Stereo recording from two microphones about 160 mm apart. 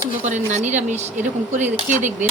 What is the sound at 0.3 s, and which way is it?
Speech, 50° right (ahead or behind).